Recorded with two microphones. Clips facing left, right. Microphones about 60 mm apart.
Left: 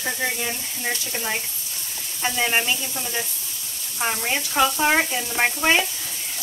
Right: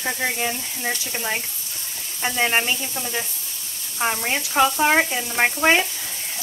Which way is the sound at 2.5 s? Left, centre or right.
Centre.